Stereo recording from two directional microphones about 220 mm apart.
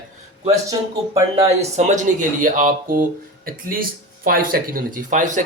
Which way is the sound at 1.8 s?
35° right (ahead or behind).